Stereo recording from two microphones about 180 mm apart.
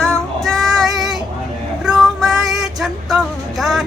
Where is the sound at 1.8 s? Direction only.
5° right (ahead or behind).